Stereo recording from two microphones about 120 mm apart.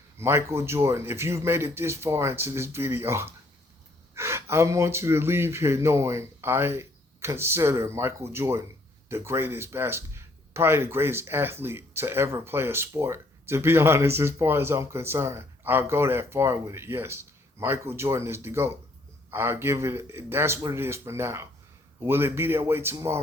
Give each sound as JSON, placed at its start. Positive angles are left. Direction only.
{"t": 0.2, "sound": "speech", "side_deg": -20}